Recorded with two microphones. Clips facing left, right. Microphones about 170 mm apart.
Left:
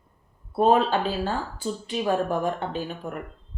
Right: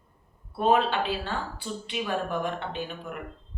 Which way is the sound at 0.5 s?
40° left (ahead or behind).